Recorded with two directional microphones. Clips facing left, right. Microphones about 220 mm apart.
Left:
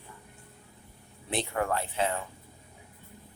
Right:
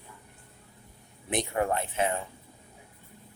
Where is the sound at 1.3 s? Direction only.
20° right (ahead or behind).